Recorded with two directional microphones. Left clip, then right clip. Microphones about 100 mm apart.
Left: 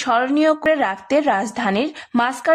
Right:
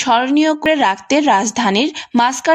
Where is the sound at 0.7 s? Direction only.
25° right (ahead or behind).